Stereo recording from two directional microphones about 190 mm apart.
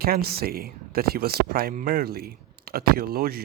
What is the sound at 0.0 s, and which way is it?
Speech, 55° right (ahead or behind).